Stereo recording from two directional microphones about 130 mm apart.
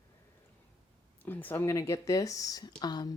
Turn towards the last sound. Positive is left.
turn(degrees=30)  # may be behind; listen again after turning